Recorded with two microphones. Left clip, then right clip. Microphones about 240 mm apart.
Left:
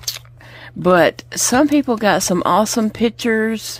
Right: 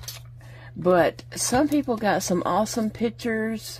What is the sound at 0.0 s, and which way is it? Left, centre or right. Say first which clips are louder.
Speech: left 13 dB; left.